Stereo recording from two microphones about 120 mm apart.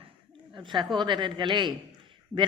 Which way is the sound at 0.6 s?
40° right (ahead or behind).